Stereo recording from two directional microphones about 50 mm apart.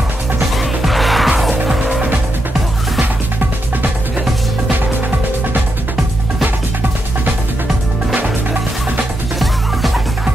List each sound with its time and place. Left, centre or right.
0.6 s music: centre
1.5 s music: centre
3.0 s music: right
9.4 s music: centre